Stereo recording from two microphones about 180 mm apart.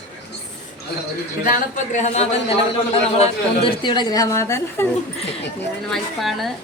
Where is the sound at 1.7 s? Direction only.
40° left (ahead or behind); by 4.9 s 15° left (ahead or behind).